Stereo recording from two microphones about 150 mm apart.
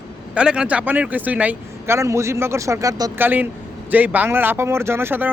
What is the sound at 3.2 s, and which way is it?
Speech, 15° right (ahead or behind).